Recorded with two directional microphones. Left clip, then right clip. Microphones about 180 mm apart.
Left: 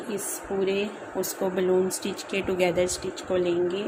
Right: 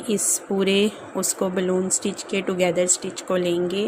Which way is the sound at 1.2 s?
30° right (ahead or behind).